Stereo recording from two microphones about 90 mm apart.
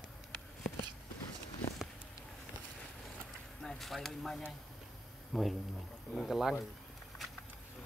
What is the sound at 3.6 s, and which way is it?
Speech, 5° left (ahead or behind).